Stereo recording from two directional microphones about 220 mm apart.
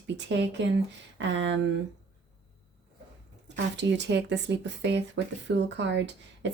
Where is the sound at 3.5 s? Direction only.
55° right (ahead or behind).